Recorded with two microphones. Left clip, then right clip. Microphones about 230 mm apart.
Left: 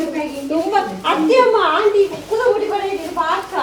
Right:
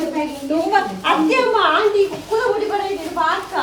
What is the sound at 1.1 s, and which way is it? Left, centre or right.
Speech, centre.